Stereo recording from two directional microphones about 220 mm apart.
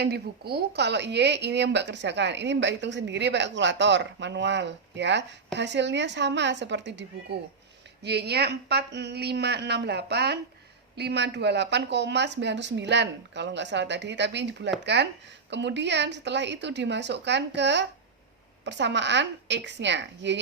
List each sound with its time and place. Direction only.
0.0 s a woman's voice: 45° right (ahead or behind)
8.0 s a woman's voice: 50° right (ahead or behind)